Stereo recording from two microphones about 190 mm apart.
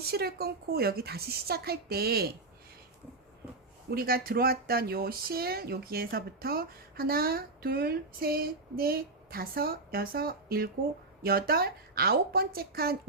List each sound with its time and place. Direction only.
0.0 s a woman's voice: 55° right (ahead or behind)
3.8 s speech: 50° right (ahead or behind)